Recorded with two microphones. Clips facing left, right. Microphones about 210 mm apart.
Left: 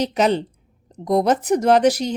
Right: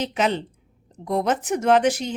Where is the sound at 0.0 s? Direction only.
40° left (ahead or behind).